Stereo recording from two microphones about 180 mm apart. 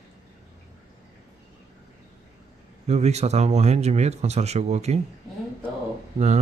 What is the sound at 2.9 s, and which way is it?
Speech, 40° right (ahead or behind).